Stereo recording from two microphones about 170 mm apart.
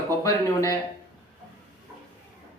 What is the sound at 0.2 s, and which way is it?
Speech, 20° left (ahead or behind).